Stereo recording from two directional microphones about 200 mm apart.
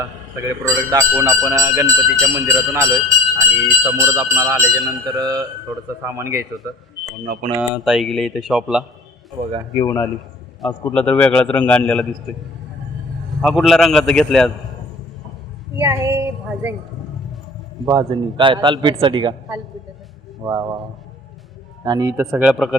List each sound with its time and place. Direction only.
0.0 s speech: 15° right (ahead or behind)
7.5 s speech: centre (ahead or behind)
9.7 s a man's voice: 15° left (ahead or behind)
13.4 s speech: centre (ahead or behind)
15.8 s speech: 15° right (ahead or behind)
17.8 s a man's voice: 25° right (ahead or behind)
21.8 s speech: 20° right (ahead or behind)
22.3 s speech: centre (ahead or behind)